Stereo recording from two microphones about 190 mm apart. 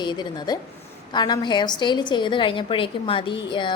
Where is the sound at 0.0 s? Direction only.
25° left (ahead or behind).